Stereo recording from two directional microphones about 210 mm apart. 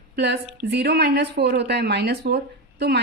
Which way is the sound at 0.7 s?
55° right (ahead or behind).